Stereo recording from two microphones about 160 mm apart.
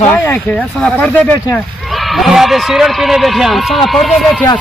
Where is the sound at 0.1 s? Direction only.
10° left (ahead or behind).